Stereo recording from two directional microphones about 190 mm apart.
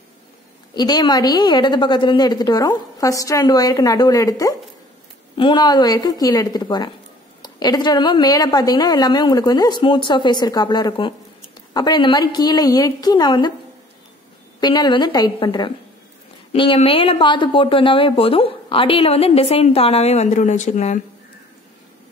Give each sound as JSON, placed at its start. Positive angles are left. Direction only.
{"t": 0.7, "sound": "a woman's voice", "side_deg": 20}
{"t": 14.6, "sound": "a woman's voice", "side_deg": 25}